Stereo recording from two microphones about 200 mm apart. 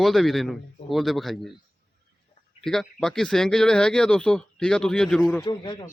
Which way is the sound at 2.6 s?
Centre (ahead or behind).